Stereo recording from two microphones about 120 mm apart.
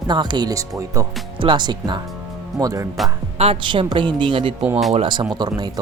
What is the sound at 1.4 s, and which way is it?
Speech, 40° right (ahead or behind).